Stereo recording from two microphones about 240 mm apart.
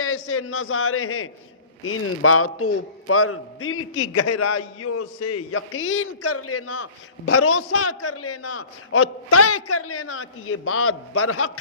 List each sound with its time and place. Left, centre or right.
0.0 s a man's voice: left